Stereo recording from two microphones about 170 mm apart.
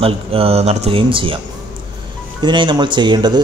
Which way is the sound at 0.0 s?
35° right (ahead or behind).